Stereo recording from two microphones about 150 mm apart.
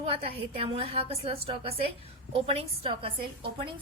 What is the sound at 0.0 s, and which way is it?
A woman's voice, 40° right (ahead or behind).